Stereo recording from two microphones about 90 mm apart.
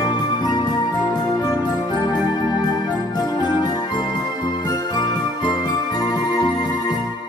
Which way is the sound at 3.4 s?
55° left (ahead or behind).